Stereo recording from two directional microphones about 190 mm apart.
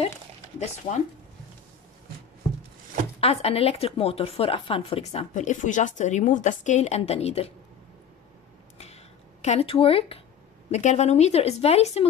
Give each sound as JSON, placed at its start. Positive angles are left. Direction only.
{"t": 0.6, "sound": "a woman's voice", "side_deg": 35}
{"t": 3.2, "sound": "a woman's voice", "side_deg": 30}
{"t": 8.7, "sound": "a sound", "side_deg": 35}
{"t": 10.7, "sound": "a woman's voice", "side_deg": 35}